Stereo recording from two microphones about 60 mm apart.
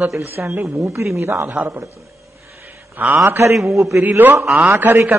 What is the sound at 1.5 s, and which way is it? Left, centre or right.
Speech, right.